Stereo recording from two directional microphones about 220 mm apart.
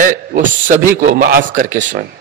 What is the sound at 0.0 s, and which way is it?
A man's voice, 40° right (ahead or behind).